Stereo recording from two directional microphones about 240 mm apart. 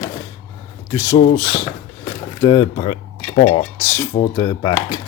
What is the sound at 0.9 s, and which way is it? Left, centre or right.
Speech, centre.